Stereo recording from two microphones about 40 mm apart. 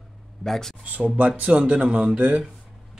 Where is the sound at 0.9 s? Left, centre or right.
Right.